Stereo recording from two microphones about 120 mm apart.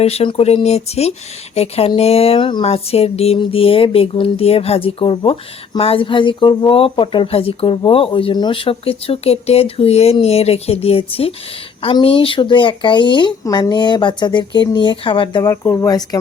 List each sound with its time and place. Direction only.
0.0 s speech: 55° left (ahead or behind)
2.6 s speech: 55° left (ahead or behind)
15.4 s speech: 25° left (ahead or behind)